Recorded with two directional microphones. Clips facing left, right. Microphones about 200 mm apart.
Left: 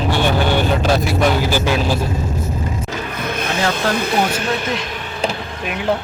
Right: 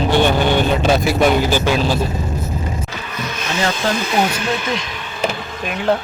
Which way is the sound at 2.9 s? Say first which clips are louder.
Left 3 dB; 55° left (ahead or behind).